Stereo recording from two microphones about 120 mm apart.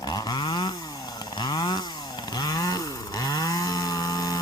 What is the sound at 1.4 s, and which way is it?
Chainsaw, 35° left (ahead or behind).